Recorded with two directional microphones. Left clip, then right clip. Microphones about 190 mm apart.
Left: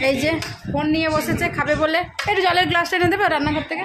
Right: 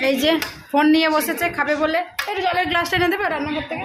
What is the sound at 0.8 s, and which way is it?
Speech, 30° right (ahead or behind).